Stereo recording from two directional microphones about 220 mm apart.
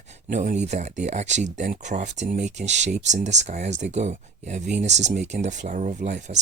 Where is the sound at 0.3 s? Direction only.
35° right (ahead or behind).